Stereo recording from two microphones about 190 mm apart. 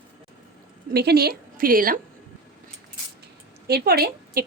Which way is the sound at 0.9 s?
55° right (ahead or behind).